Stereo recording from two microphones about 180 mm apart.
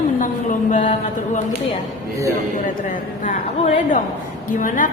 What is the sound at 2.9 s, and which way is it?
A woman's voice, 45° left (ahead or behind).